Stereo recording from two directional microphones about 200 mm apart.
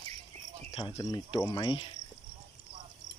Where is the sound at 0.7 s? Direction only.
25° left (ahead or behind).